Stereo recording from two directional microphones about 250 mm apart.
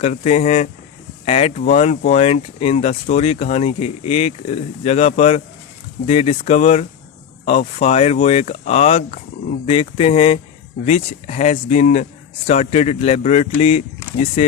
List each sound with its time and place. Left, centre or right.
0.0 s speech: left